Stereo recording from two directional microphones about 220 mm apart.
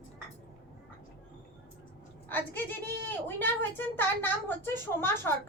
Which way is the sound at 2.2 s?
10° left (ahead or behind).